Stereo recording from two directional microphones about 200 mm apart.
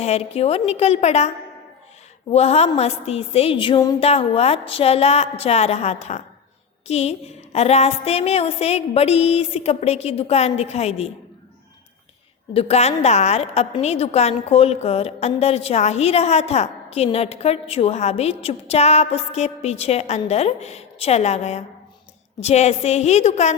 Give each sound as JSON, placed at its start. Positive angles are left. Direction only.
{"t": 0.0, "sound": "a woman's voice", "side_deg": 30}
{"t": 2.3, "sound": "a woman's voice", "side_deg": 30}
{"t": 12.5, "sound": "a woman's voice", "side_deg": 30}